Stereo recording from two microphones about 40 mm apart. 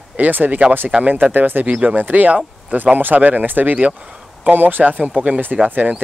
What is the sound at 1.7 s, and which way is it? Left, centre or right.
Speech, right.